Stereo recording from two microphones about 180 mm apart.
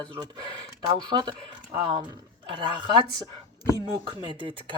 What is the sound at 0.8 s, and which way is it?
Speech, 25° right (ahead or behind).